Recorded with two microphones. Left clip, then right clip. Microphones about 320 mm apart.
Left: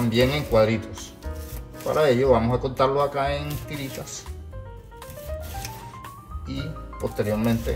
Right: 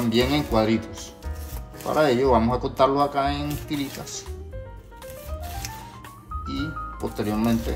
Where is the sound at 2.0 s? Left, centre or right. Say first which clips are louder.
Left 2 dB; centre.